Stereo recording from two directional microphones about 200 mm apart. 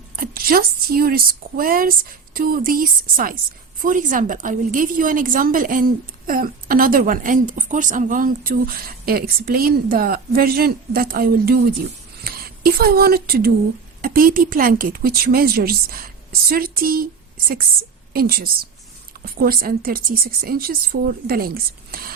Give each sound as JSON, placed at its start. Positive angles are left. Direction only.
{"t": 0.2, "sound": "a woman's voice", "side_deg": -45}
{"t": 18.1, "sound": "a woman's voice", "side_deg": -50}